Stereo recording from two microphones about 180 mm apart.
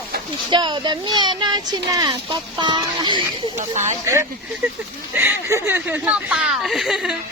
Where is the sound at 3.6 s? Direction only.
40° right (ahead or behind).